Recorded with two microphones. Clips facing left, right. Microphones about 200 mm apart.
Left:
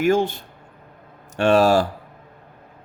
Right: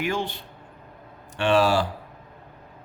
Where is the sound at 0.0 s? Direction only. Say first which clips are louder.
Left 9 dB; 45° left (ahead or behind).